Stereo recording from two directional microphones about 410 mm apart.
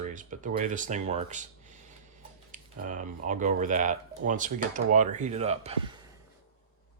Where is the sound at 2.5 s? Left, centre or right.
Centre.